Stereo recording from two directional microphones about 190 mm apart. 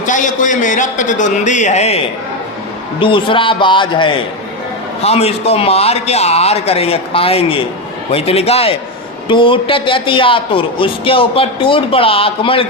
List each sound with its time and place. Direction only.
0.0 s a man's voice: 40° left (ahead or behind)
3.0 s a man's voice: 25° left (ahead or behind)